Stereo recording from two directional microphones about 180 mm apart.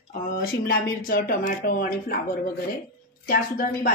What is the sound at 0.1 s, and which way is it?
A woman's voice, 50° left (ahead or behind).